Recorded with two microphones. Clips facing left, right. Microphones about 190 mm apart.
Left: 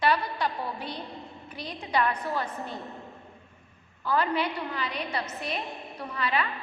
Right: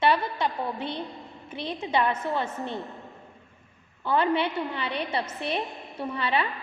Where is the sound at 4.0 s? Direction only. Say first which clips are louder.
Right 3 dB; 25° right (ahead or behind).